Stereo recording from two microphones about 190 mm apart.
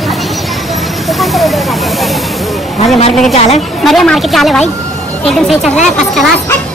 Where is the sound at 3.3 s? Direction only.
35° left (ahead or behind).